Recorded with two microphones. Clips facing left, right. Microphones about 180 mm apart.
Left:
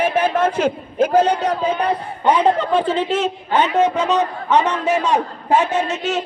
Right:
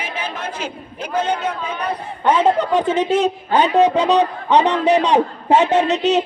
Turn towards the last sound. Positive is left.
turn(degrees=-20)  # may be behind; listen again after turning